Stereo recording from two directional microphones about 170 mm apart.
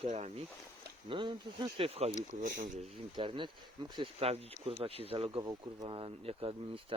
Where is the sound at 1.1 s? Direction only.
30° right (ahead or behind).